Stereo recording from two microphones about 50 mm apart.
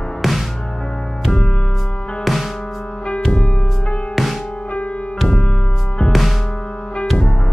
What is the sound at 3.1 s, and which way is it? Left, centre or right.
Music, centre.